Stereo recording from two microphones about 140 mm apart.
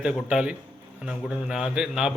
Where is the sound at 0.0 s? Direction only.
5° right (ahead or behind).